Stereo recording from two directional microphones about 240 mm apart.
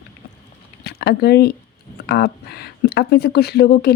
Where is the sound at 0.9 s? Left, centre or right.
Left.